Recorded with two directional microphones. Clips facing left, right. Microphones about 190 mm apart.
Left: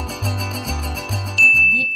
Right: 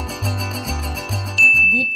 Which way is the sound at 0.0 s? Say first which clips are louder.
Even; centre (ahead or behind).